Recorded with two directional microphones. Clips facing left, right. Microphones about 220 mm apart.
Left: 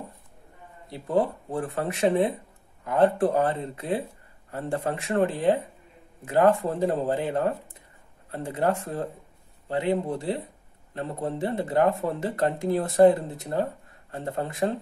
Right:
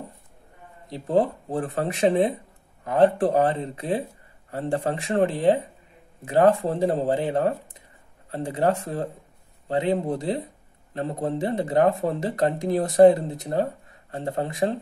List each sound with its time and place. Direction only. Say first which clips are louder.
0.8 s speech: right 3 dB; 20° right (ahead or behind)
10.1 s speech: right 2 dB; 20° right (ahead or behind)